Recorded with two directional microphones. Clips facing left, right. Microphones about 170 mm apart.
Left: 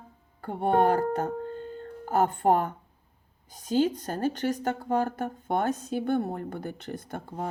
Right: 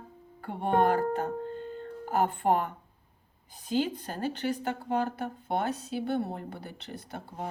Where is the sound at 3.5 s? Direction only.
40° left (ahead or behind).